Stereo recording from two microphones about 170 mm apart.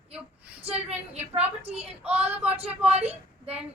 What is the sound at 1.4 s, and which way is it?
Speech, 35° right (ahead or behind).